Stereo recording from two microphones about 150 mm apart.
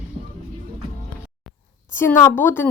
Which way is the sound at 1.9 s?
15° left (ahead or behind).